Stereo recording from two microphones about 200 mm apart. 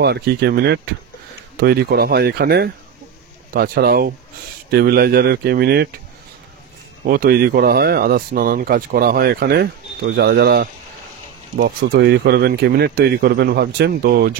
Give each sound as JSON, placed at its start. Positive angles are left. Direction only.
{"t": 0.0, "sound": "speech", "side_deg": -55}
{"t": 7.1, "sound": "speech", "side_deg": -50}